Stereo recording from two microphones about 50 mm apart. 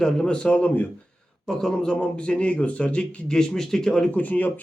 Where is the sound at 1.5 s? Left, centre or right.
Centre; by 3.3 s left.